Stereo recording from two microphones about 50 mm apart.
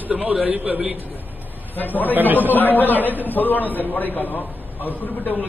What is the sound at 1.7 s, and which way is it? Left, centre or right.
A man's voice, left.